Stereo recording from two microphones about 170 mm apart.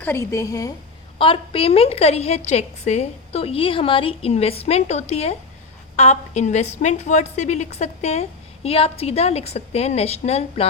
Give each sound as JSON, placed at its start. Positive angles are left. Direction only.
{"t": 0.0, "sound": "a woman's voice", "side_deg": 15}
{"t": 1.2, "sound": "a woman's voice", "side_deg": 30}